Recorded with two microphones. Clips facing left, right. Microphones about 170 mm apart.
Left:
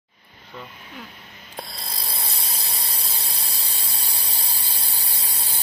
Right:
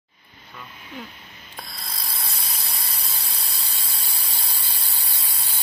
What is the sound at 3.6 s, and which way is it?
Ratchet, 40° left (ahead or behind).